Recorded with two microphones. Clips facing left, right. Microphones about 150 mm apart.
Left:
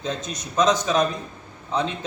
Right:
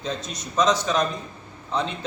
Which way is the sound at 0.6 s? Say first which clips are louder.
Left 2 dB; 5° left (ahead or behind).